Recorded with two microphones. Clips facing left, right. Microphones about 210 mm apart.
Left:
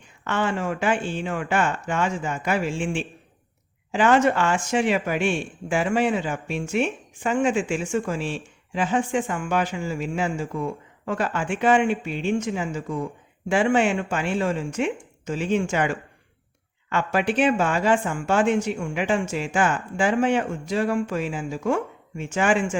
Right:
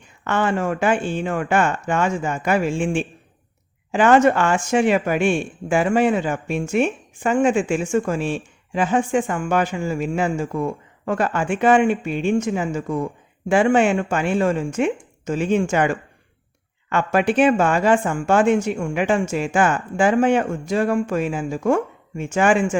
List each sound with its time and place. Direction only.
0.3 s speech: 50° right (ahead or behind)